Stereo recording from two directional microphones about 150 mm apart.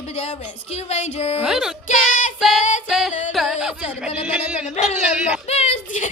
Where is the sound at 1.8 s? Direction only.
60° left (ahead or behind).